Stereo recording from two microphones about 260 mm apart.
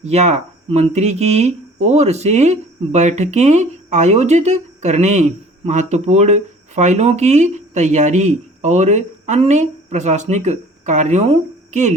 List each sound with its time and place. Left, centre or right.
0.0 s speech: right